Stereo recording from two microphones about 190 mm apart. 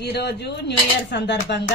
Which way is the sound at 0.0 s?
60° left (ahead or behind).